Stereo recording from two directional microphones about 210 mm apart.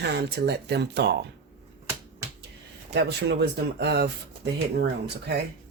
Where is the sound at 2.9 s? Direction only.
50° right (ahead or behind).